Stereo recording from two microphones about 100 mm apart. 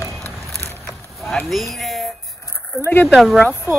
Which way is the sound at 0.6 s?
25° left (ahead or behind).